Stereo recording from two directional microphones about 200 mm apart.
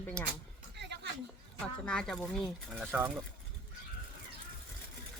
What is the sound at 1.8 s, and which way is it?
Speech, 5° left (ahead or behind).